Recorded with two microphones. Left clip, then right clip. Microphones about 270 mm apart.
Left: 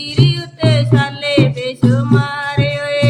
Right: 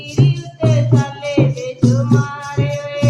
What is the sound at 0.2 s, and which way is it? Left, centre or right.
Music, left.